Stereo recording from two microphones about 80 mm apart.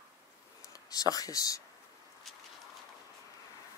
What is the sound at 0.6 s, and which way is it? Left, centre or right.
Speech, left.